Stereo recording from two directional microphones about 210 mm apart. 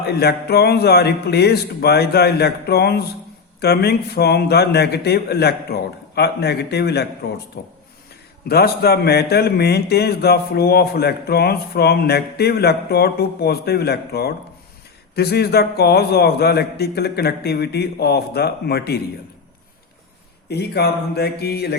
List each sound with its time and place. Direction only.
0.0 s a man's voice: 50° left (ahead or behind)
8.4 s a man's voice: 50° left (ahead or behind)
20.5 s a man's voice: 50° left (ahead or behind)